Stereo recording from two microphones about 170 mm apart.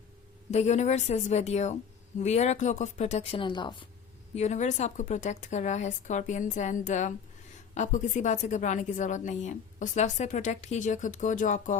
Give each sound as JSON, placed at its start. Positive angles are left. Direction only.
{"t": 0.5, "sound": "a woman's voice", "side_deg": 40}
{"t": 4.4, "sound": "a woman's voice", "side_deg": 45}